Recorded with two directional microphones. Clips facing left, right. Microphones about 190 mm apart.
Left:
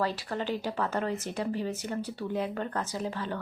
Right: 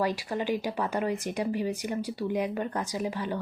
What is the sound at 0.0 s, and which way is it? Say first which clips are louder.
Speech: right 2 dB; 15° right (ahead or behind).